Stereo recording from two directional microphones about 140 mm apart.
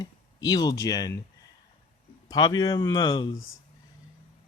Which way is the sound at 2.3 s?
30° left (ahead or behind).